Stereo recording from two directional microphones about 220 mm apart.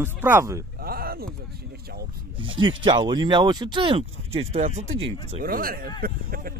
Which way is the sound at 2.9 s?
20° right (ahead or behind).